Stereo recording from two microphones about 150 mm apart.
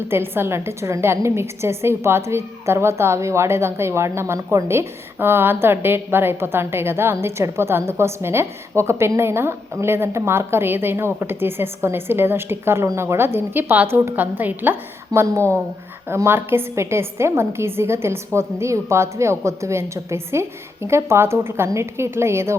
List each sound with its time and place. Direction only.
0.1 s a woman's voice: 15° right (ahead or behind)